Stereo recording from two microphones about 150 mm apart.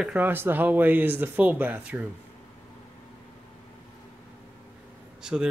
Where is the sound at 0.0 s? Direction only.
10° right (ahead or behind).